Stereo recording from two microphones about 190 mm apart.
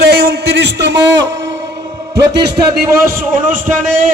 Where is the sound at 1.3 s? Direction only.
65° right (ahead or behind).